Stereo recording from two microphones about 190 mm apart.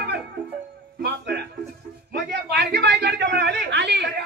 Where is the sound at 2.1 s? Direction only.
60° right (ahead or behind).